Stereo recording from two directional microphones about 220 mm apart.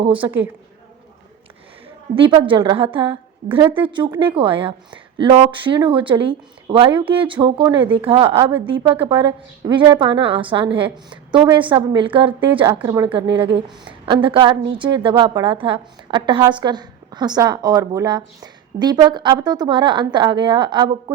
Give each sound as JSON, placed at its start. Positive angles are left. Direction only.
{"t": 0.1, "sound": "a woman's voice", "side_deg": -10}
{"t": 2.1, "sound": "a woman's voice", "side_deg": -25}